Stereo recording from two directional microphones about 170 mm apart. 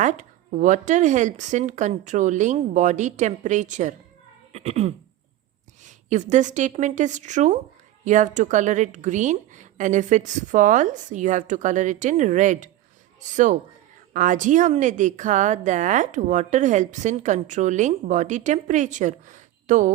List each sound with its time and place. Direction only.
0.0 s a woman's voice: 45° right (ahead or behind)
4.5 s a sound: 40° right (ahead or behind)
5.8 s a woman's voice: 45° right (ahead or behind)